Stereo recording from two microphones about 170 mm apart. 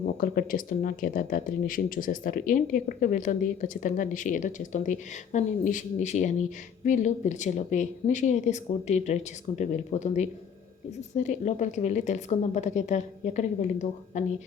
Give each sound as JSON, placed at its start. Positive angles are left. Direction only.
{"t": 0.2, "sound": "speech", "side_deg": 55}